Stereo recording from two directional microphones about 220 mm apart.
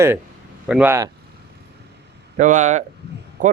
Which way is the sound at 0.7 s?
10° right (ahead or behind).